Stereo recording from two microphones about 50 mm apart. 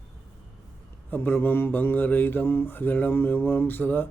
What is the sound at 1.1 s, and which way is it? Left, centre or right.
Speech, left.